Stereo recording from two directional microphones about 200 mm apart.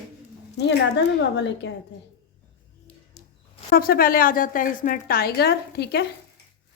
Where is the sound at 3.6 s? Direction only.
50° left (ahead or behind).